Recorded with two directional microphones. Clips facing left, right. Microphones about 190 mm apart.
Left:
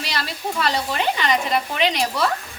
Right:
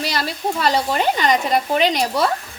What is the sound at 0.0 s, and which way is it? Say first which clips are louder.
Speech: right 5 dB; 40° right (ahead or behind).